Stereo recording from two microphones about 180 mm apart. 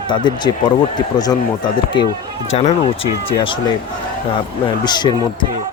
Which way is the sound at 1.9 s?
25° left (ahead or behind).